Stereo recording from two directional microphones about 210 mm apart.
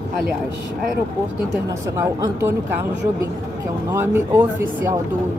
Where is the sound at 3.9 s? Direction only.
10° right (ahead or behind).